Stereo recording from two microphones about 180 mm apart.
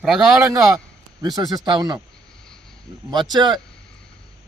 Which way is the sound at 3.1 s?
25° right (ahead or behind).